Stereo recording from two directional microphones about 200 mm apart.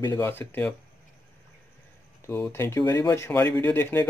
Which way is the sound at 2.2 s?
15° left (ahead or behind).